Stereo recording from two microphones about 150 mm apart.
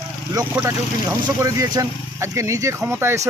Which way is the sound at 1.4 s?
20° right (ahead or behind).